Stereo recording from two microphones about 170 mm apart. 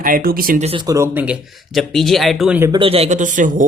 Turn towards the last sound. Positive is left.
turn(degrees=-50)  # may be behind; listen again after turning